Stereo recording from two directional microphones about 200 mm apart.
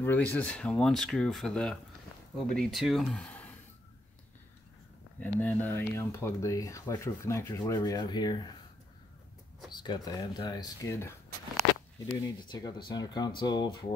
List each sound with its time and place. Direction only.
0.0 s speech: 10° left (ahead or behind)
5.2 s speech: 10° left (ahead or behind)
9.7 s speech: 20° left (ahead or behind)